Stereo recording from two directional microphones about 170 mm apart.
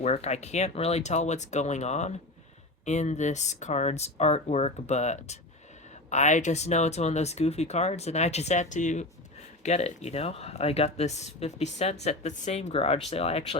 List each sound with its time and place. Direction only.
0.0 s speech: 40° left (ahead or behind)